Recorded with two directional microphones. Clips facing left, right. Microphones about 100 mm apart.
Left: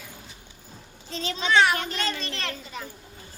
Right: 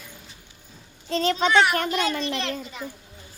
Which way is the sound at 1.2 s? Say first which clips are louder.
Right 7 dB; 50° right (ahead or behind).